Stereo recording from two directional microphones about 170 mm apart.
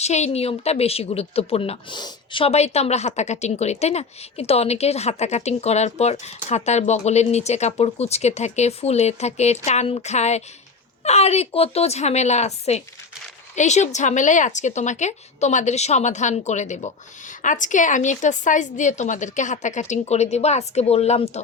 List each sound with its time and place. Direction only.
0.0 s speech: 40° left (ahead or behind)